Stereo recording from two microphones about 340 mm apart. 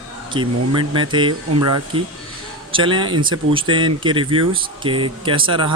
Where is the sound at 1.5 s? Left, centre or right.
Right.